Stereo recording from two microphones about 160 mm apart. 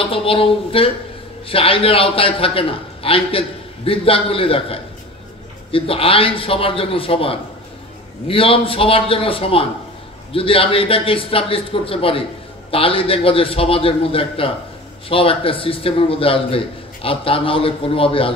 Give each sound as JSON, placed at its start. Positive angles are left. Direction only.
{"t": 0.0, "sound": "a man's voice", "side_deg": 35}